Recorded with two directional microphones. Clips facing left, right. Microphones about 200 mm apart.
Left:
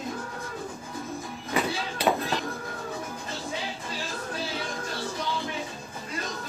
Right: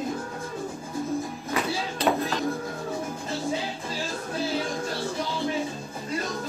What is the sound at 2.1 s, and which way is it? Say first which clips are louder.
Music: right 1 dB; centre (ahead or behind).